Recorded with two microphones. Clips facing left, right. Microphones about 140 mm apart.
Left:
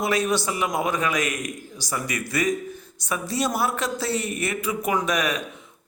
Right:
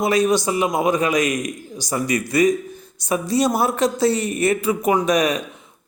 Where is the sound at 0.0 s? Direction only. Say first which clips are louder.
Right 5 dB; 15° right (ahead or behind).